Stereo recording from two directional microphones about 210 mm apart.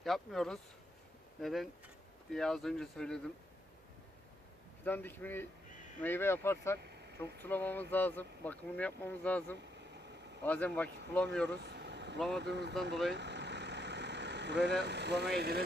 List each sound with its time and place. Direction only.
0.0 s speech: centre (ahead or behind)
4.9 s speech: 10° left (ahead or behind)
11.4 s vehicle: 55° right (ahead or behind)
12.4 s speech: 55° right (ahead or behind)
13.1 s vehicle: 55° right (ahead or behind)